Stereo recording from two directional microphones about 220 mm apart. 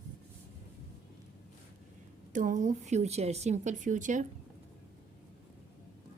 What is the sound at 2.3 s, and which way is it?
A woman's voice, 35° right (ahead or behind).